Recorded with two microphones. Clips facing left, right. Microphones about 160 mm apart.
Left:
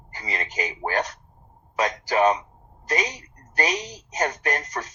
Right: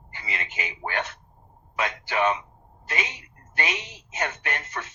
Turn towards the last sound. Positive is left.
turn(degrees=40)  # may be behind; listen again after turning